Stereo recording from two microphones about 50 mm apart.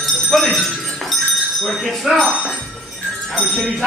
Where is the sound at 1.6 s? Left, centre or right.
Centre.